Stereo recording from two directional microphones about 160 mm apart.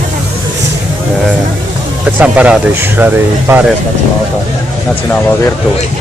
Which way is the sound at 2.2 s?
10° right (ahead or behind).